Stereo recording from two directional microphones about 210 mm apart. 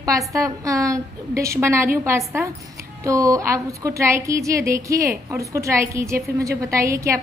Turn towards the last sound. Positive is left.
turn(degrees=-15)  # may be behind; listen again after turning